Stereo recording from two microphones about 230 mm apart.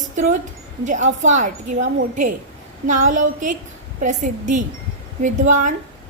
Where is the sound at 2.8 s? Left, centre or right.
Right.